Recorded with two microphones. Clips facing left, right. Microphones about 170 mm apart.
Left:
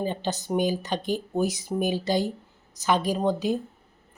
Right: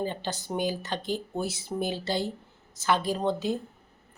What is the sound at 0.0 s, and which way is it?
Speech, 20° left (ahead or behind).